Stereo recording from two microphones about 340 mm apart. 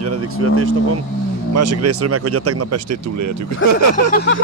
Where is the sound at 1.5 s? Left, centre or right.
Right.